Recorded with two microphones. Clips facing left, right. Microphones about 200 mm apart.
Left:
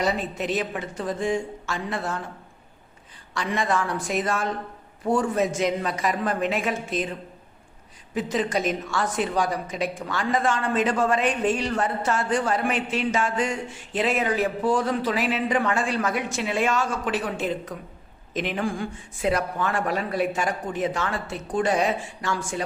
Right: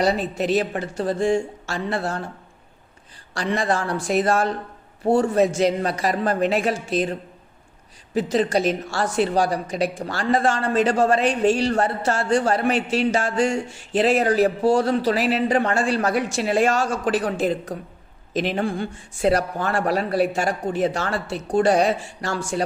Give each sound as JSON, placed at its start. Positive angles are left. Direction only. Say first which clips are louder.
{"t": 0.0, "sound": "speech", "louder": "right 4 dB", "side_deg": -35}
{"t": 3.3, "sound": "speech", "louder": "right 2 dB", "side_deg": -35}